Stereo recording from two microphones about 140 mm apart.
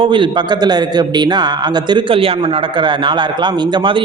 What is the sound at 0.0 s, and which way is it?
A man's voice, 35° right (ahead or behind).